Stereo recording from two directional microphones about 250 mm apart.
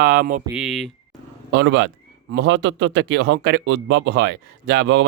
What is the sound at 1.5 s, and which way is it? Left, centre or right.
Speech, right.